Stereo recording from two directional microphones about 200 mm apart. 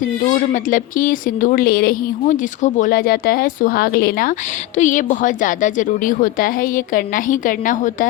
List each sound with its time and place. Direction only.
0.5 s a woman's voice: 40° left (ahead or behind)